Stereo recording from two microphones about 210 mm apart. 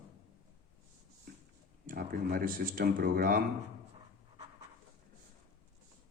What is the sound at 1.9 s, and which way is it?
Speech, 40° right (ahead or behind).